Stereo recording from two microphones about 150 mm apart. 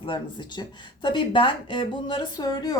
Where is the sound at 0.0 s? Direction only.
35° left (ahead or behind).